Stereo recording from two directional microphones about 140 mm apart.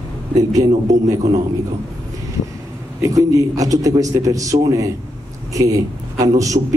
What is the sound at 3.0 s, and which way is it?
A man's voice, 25° right (ahead or behind).